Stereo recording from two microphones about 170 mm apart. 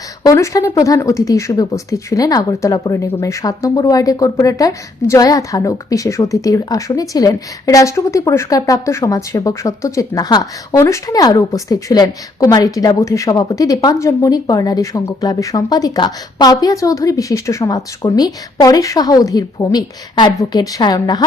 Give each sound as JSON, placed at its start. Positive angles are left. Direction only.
{"t": 0.2, "sound": "speech", "side_deg": 20}